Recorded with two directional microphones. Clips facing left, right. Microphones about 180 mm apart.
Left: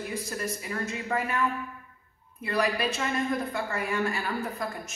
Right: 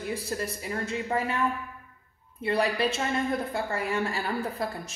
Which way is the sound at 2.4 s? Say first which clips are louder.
Right 2 dB; 30° right (ahead or behind).